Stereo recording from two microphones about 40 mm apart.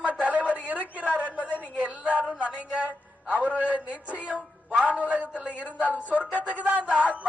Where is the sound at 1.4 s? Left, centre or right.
Left.